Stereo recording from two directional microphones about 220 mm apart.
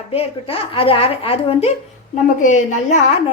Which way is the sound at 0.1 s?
25° left (ahead or behind).